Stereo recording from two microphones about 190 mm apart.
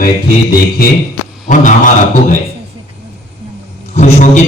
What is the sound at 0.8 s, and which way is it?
A man's voice, 50° left (ahead or behind).